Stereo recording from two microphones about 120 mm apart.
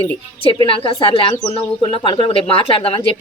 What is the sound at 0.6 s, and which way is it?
Speech, 50° left (ahead or behind).